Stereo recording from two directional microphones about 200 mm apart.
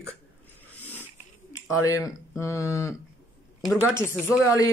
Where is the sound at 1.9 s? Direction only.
15° left (ahead or behind).